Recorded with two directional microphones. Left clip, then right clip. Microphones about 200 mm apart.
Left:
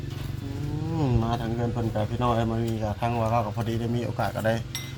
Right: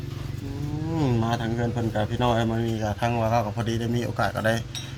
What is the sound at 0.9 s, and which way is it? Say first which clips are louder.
A man's voice: right 2 dB; 20° right (ahead or behind).